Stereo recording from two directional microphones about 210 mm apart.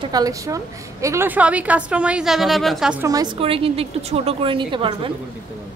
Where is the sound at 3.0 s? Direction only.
20° right (ahead or behind).